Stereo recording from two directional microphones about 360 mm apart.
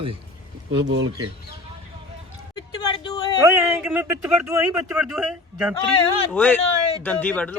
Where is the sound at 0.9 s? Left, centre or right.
Right.